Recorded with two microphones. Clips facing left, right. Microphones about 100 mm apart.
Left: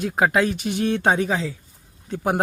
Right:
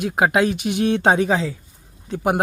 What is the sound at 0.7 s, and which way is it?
Speech, 75° right (ahead or behind).